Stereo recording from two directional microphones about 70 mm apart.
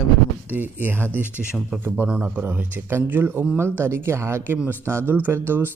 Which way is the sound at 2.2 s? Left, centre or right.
Right.